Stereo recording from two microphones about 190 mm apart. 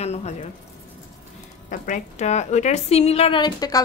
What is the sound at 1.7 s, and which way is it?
A woman's voice, 40° left (ahead or behind).